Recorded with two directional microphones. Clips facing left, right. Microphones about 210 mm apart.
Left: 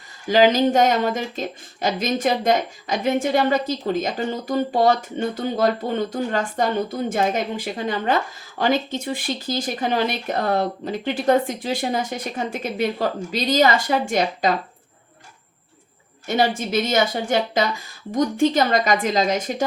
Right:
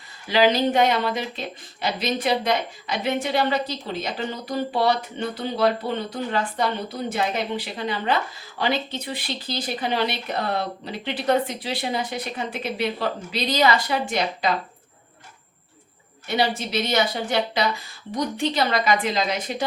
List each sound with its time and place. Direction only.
0.3 s speech: 45° left (ahead or behind)
16.2 s a woman's voice: 45° left (ahead or behind)